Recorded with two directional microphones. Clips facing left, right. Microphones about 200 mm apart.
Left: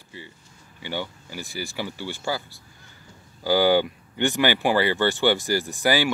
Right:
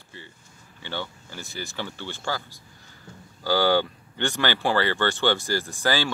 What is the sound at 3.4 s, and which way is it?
Speech, 15° left (ahead or behind).